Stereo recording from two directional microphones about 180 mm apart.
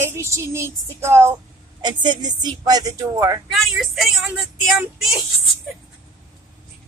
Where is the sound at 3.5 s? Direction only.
Centre (ahead or behind).